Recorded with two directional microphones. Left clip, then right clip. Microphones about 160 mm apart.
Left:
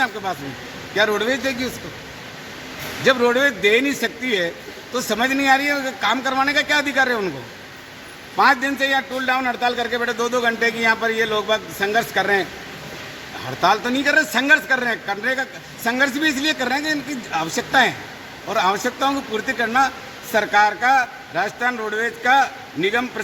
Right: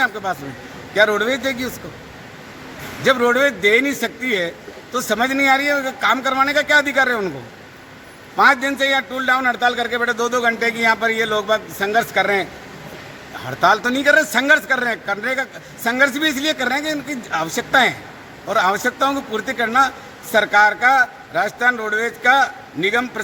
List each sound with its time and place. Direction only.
0.0 s a man's voice: 20° right (ahead or behind)
3.1 s a man's voice: 20° right (ahead or behind)
8.4 s a man's voice: 25° right (ahead or behind)
13.6 s a man's voice: 25° right (ahead or behind)